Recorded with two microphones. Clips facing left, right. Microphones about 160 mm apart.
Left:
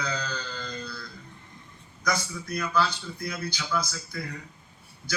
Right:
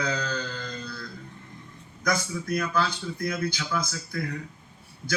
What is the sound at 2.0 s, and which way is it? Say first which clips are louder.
A man's voice: right 2 dB; 50° right (ahead or behind).